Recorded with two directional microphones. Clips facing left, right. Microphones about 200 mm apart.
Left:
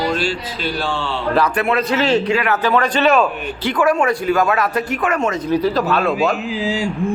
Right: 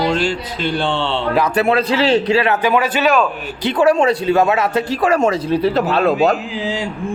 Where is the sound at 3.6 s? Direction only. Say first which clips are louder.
Right 3 dB; 25° right (ahead or behind).